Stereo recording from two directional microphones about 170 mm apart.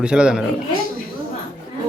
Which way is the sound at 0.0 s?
5° right (ahead or behind).